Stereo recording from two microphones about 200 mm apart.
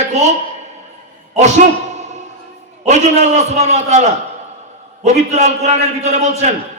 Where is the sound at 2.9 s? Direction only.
35° right (ahead or behind).